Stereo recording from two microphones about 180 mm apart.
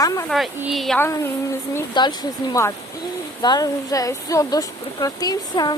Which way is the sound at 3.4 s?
20° left (ahead or behind).